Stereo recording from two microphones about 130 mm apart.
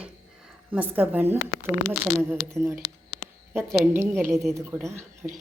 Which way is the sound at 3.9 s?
20° right (ahead or behind).